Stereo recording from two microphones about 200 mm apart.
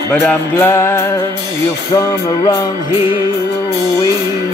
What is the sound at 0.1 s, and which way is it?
Music, 5° left (ahead or behind).